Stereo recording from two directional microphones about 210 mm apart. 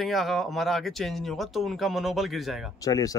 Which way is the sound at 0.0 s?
Centre (ahead or behind).